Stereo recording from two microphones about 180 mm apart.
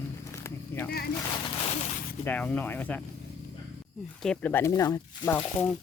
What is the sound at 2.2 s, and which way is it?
Speech, 10° left (ahead or behind).